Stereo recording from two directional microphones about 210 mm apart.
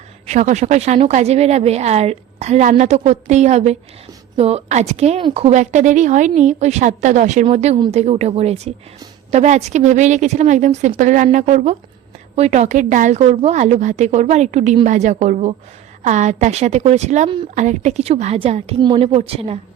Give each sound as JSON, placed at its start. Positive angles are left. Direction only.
{"t": 0.3, "sound": "a woman's voice", "side_deg": -35}
{"t": 17.5, "sound": "a woman's voice", "side_deg": -35}